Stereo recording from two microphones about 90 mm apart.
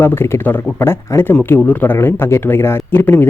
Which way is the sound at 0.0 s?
25° left (ahead or behind).